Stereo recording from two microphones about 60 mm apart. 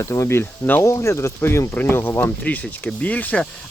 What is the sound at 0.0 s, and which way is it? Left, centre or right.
Speech, left.